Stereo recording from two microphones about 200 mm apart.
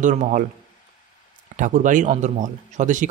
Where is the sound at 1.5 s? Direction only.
40° right (ahead or behind).